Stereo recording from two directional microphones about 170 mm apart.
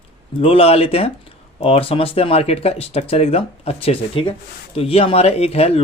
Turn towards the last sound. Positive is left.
turn(degrees=35)  # may be behind; listen again after turning